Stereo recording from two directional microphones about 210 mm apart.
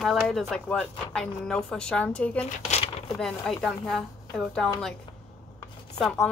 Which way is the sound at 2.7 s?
30° left (ahead or behind).